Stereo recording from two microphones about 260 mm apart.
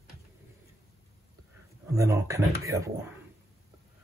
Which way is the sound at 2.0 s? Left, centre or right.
Centre.